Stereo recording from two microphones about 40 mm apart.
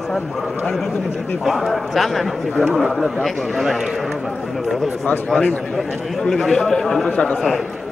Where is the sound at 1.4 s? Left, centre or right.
Centre.